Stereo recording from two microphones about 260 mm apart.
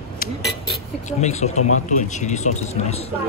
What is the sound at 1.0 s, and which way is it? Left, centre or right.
Speech, left.